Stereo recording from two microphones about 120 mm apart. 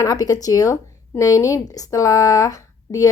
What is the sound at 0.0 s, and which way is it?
Speech, 30° left (ahead or behind).